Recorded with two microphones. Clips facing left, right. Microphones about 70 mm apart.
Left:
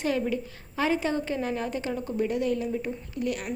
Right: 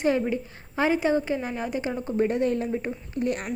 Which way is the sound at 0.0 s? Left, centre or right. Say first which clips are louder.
Right 3 dB; right.